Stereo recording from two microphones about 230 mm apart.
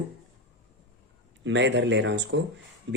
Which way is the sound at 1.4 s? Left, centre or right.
Right.